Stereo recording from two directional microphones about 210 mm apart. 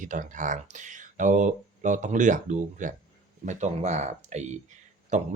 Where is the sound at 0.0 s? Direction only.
40° right (ahead or behind).